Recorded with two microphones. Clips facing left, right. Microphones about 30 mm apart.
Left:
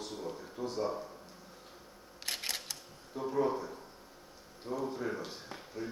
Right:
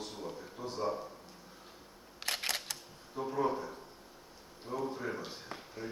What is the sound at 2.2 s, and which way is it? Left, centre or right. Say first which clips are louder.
Camera: right 3 dB; right.